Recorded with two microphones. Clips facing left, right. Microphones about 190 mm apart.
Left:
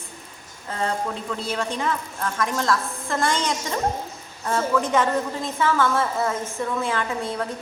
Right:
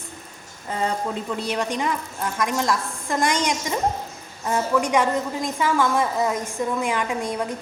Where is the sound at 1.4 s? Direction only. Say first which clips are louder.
Right 2 dB; 15° right (ahead or behind).